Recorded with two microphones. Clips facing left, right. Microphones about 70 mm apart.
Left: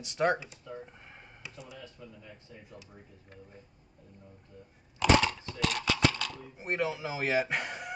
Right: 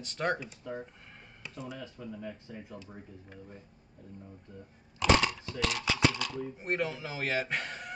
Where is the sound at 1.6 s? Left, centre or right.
Right.